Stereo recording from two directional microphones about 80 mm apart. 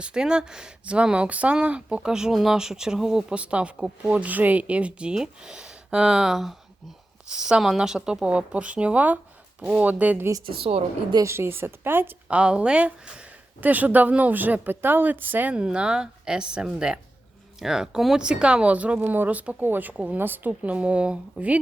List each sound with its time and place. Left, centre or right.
0.0 s a woman's voice: centre
11.2 s a woman's voice: right
12.3 s a woman's voice: centre